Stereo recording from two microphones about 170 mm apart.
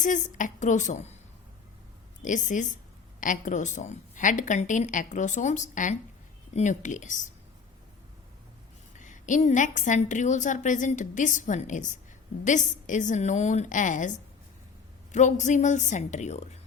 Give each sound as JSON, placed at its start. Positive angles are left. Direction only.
{"t": 0.0, "sound": "a woman's voice", "side_deg": 50}
{"t": 2.2, "sound": "a woman's voice", "side_deg": 50}
{"t": 9.0, "sound": "a woman's voice", "side_deg": 50}
{"t": 15.1, "sound": "a woman's voice", "side_deg": 45}